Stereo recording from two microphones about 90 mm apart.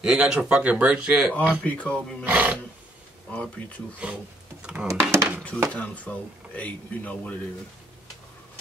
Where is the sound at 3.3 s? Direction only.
15° left (ahead or behind).